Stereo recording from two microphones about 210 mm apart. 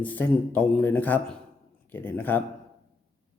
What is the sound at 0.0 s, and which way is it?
Speech, 10° left (ahead or behind).